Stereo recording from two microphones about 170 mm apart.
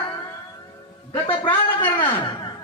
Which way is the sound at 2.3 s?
25° left (ahead or behind).